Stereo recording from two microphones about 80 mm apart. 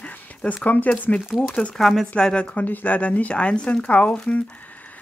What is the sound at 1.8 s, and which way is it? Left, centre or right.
Speech, centre.